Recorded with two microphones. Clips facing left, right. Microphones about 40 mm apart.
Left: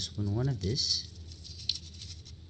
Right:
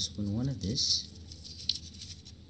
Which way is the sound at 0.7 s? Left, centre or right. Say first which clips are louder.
Right 1 dB; right.